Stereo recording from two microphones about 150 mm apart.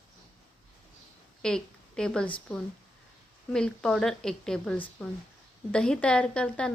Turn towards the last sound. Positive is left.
turn(degrees=5)  # may be behind; listen again after turning